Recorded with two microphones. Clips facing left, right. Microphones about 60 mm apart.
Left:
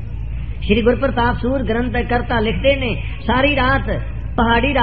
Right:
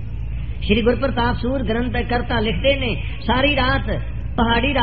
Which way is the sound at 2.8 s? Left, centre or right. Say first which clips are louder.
Left 2 dB; centre.